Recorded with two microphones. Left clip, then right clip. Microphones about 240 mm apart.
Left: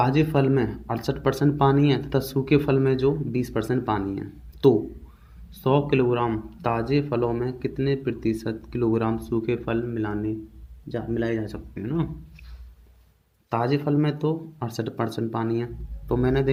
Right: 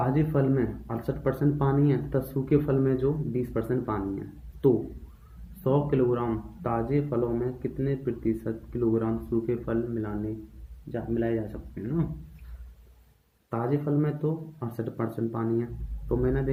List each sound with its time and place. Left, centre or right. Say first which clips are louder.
0.0 s speech: left 5 dB; left
5.6 s speech: left 4 dB; left
13.5 s speech: left 5 dB; left